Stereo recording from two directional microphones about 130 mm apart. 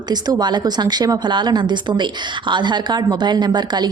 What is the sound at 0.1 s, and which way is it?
Speech, 35° right (ahead or behind).